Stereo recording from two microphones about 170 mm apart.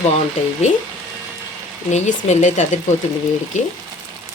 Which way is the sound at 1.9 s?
45° left (ahead or behind).